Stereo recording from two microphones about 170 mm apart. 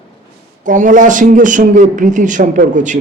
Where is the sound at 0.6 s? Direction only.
50° right (ahead or behind).